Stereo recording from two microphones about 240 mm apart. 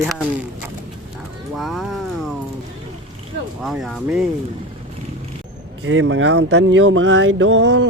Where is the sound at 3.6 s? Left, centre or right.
Centre.